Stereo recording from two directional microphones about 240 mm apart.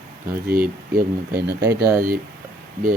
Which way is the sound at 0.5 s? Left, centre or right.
Right.